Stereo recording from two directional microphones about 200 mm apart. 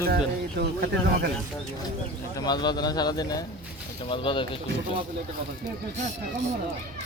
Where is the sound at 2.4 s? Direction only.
20° left (ahead or behind).